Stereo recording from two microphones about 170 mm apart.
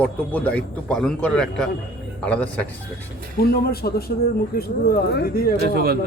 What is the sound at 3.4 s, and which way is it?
Speech, 65° left (ahead or behind).